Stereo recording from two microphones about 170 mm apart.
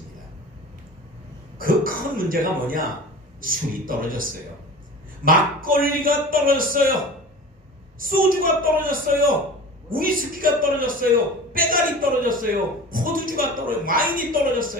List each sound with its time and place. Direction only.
1.6 s a woman's voice: 55° right (ahead or behind)
8.0 s a woman's voice: 55° right (ahead or behind)